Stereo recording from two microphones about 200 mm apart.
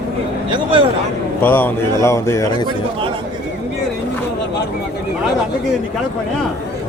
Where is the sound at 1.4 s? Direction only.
10° left (ahead or behind).